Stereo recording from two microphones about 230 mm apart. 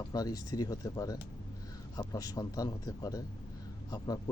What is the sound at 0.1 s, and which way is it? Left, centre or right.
Speech, centre.